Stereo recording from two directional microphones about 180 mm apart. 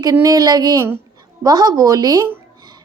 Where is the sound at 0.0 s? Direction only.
20° right (ahead or behind).